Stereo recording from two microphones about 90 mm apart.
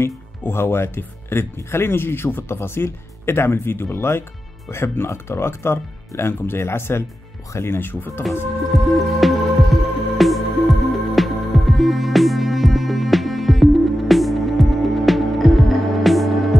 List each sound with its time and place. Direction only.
0.0 s speech: 25° left (ahead or behind)
9.0 s music: centre (ahead or behind)